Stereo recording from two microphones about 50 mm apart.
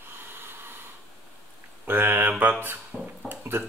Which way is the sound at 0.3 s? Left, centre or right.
Right.